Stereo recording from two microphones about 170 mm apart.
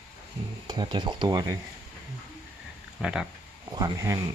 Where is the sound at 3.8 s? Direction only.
20° right (ahead or behind).